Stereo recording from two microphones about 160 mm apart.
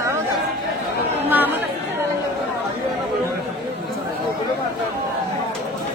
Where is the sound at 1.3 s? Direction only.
10° right (ahead or behind).